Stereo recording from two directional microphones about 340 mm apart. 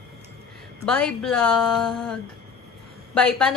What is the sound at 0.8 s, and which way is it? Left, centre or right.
A woman's voice, centre.